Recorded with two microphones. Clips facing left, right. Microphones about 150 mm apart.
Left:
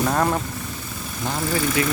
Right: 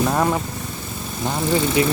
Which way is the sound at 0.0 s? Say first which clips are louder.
Right 2 dB; 5° right (ahead or behind).